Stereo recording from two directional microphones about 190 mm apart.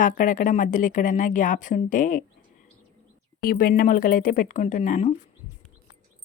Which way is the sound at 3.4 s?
50° left (ahead or behind).